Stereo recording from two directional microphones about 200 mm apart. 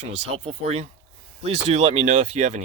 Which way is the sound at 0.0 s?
30° right (ahead or behind).